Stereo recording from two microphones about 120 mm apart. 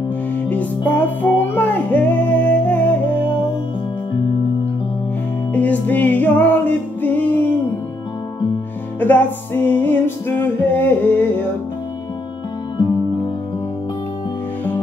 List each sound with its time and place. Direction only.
0.5 s music: 15° left (ahead or behind)
5.5 s music: 15° left (ahead or behind)
9.0 s music: 15° left (ahead or behind)